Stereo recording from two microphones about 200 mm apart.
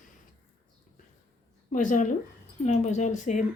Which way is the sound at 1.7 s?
40° left (ahead or behind).